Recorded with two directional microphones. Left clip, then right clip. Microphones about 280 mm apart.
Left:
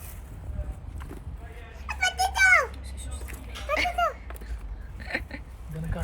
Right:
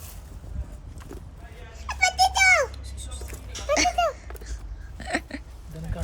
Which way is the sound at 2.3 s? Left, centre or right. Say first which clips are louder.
Right 1 dB; centre.